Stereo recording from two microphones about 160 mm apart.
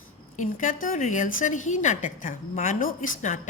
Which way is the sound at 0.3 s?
50° left (ahead or behind).